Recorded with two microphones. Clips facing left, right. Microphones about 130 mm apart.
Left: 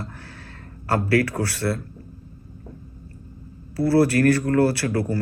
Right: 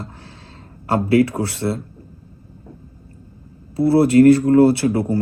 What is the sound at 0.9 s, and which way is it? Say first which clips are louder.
Speech: right 5 dB; 20° right (ahead or behind).